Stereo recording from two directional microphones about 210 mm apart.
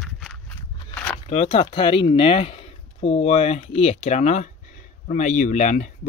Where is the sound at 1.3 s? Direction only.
30° left (ahead or behind).